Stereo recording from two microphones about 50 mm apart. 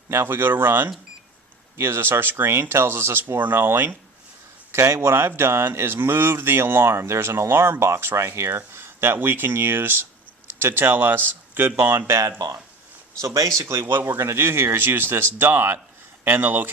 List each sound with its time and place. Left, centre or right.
0.1 s speech: right
4.7 s speech: right
7.1 s speech: right
13.2 s speech: right
13.6 s speech: right
13.8 s speech: right
16.4 s speech: right